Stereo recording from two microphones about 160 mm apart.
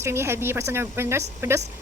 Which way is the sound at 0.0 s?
15° right (ahead or behind).